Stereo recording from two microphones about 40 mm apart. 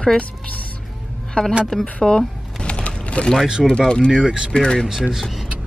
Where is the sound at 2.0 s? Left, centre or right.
Centre.